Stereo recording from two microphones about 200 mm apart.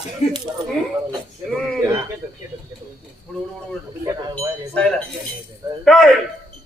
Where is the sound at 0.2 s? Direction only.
35° left (ahead or behind).